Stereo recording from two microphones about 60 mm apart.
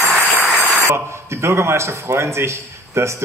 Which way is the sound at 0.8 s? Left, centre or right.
Right.